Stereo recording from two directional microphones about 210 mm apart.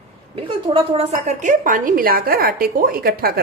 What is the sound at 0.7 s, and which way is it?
A woman's voice, 30° right (ahead or behind).